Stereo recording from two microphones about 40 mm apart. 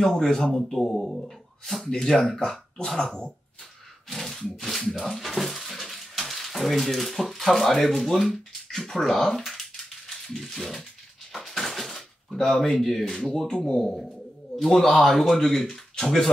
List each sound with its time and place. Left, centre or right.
0.0 s a man's voice: centre
4.1 s a sound: centre
4.6 s speech: centre
11.3 s drawer open or close: centre
12.4 s a man's voice: centre
13.9 s speech: centre